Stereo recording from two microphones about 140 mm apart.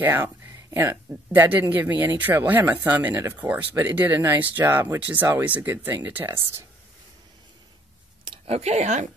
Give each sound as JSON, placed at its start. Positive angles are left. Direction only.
{"t": 0.0, "sound": "speech", "side_deg": -15}
{"t": 8.5, "sound": "a woman's voice", "side_deg": -50}